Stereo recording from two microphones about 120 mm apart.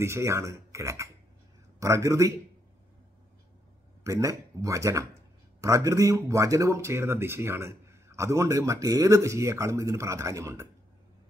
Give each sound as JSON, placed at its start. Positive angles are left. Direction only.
{"t": 0.0, "sound": "speech", "side_deg": -25}
{"t": 4.0, "sound": "speech", "side_deg": -25}